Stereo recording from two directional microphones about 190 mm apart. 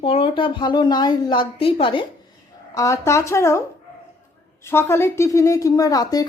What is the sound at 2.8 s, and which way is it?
A woman's voice, 15° left (ahead or behind).